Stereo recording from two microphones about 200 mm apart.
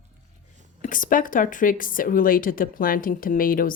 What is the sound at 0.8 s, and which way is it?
Speech, 40° left (ahead or behind).